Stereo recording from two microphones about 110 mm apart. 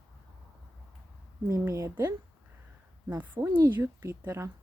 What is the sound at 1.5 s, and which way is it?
Speech, 30° right (ahead or behind).